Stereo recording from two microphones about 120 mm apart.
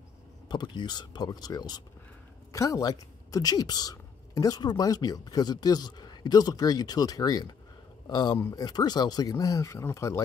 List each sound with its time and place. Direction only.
0.5 s speech: 40° left (ahead or behind)
8.4 s speech: 25° left (ahead or behind)
8.6 s speech: 35° left (ahead or behind)